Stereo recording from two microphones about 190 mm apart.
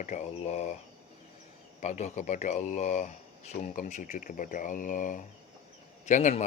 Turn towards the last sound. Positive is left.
turn(degrees=40)  # may be behind; listen again after turning